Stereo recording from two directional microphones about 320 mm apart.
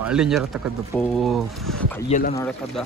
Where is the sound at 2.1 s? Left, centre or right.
Left.